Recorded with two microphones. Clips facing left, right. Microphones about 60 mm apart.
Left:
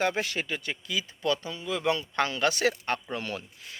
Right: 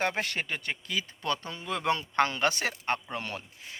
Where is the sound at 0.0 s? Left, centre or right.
Right.